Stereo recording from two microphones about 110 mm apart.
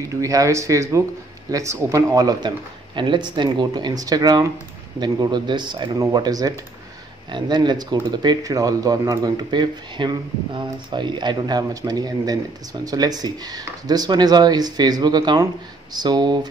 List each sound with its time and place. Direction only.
0.2 s speech: 30° right (ahead or behind)